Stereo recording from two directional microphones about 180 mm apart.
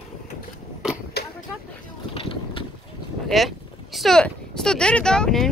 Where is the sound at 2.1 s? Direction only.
30° left (ahead or behind).